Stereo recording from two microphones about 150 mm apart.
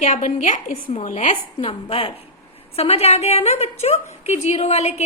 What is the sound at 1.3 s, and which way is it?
A woman's voice, 35° left (ahead or behind).